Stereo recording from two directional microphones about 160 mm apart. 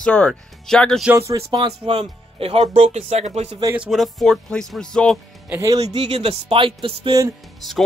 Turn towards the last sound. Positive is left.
turn(degrees=-25)  # may be behind; listen again after turning